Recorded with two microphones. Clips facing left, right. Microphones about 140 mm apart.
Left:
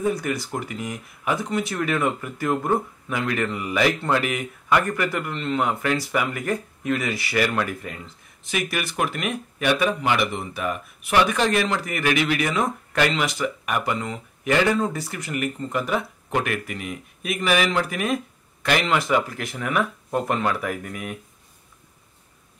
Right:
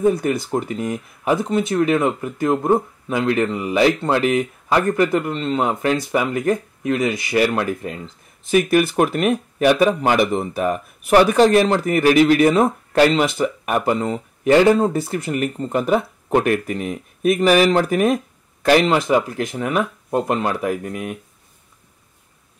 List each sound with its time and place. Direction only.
0.0 s speech: 25° right (ahead or behind)
0.7 s speech: 45° right (ahead or behind)
1.3 s speech: 25° right (ahead or behind)
8.5 s speech: 40° right (ahead or behind)
19.6 s speech: 25° right (ahead or behind)